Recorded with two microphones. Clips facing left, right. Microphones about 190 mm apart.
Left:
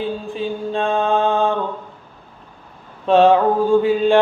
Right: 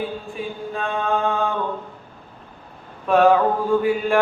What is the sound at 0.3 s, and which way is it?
Mantra, 30° left (ahead or behind).